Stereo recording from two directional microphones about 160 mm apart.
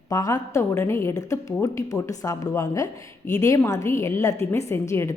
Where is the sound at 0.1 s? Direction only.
20° left (ahead or behind).